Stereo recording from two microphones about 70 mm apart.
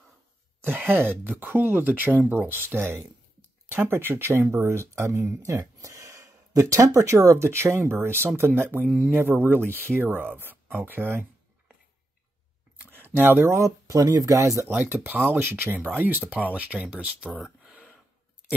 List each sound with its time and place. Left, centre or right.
0.6 s speech: right
12.9 s a sound: right
13.5 s speech: right
14.7 s speech: right